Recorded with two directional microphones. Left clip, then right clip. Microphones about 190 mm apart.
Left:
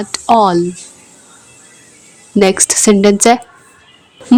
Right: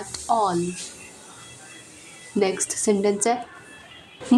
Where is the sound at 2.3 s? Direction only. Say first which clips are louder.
Left 12 dB; 45° left (ahead or behind).